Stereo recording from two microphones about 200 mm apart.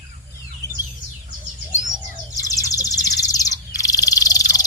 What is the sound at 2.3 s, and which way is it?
Bird, 15° left (ahead or behind).